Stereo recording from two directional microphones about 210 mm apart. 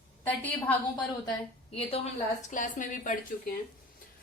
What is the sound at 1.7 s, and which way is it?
Speech, 30° left (ahead or behind).